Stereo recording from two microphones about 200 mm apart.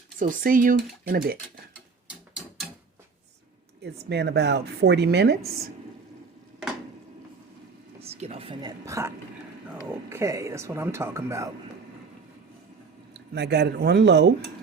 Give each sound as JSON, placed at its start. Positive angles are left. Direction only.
{"t": 0.2, "sound": "speech", "side_deg": -45}
{"t": 3.8, "sound": "a woman's voice", "side_deg": -55}
{"t": 8.0, "sound": "speech", "side_deg": -30}
{"t": 8.8, "sound": "speech", "side_deg": -15}
{"t": 13.1, "sound": "speech", "side_deg": -60}